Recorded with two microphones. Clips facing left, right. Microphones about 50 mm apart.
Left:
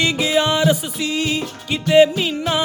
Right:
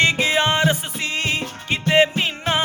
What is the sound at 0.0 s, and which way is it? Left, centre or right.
Music, right.